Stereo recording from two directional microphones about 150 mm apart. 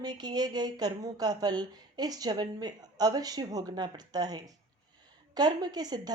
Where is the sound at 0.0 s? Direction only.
30° right (ahead or behind).